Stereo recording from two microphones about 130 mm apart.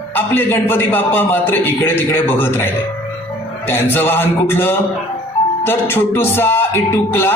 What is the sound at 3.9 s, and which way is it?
A man's voice, 15° left (ahead or behind).